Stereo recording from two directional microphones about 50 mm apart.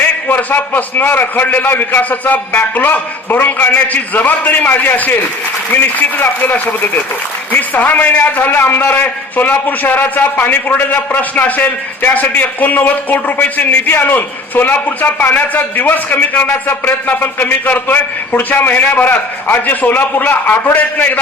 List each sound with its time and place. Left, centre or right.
0.3 s a man's voice: left